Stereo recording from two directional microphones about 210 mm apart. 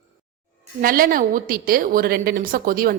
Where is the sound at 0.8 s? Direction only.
45° right (ahead or behind).